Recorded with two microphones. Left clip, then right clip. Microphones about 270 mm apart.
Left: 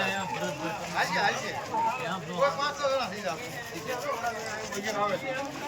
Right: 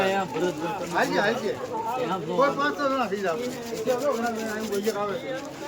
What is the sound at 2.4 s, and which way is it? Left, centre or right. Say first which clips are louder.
Speech: right 4 dB; right.